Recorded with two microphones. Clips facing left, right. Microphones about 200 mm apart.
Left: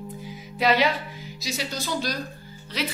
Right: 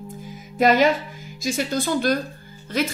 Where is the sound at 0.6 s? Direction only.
45° right (ahead or behind).